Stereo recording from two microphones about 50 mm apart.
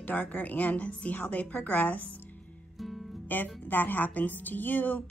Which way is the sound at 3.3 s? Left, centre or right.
Left.